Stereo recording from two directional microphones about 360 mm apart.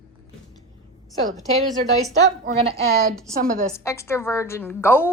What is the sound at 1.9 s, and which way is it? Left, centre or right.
A woman's voice, centre.